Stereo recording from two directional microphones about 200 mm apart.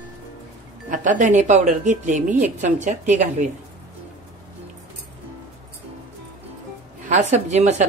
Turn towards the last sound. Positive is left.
turn(degrees=-35)  # may be behind; listen again after turning